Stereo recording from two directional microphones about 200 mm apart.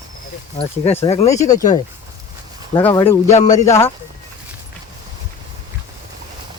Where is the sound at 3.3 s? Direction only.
35° left (ahead or behind).